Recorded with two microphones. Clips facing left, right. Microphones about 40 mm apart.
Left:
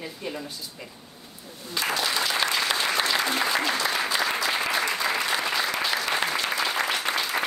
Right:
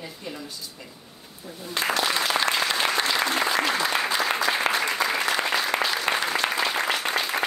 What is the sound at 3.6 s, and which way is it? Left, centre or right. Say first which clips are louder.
Applause: right 1 dB; right.